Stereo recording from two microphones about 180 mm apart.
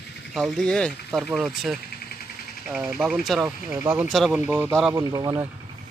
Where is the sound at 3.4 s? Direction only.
20° right (ahead or behind).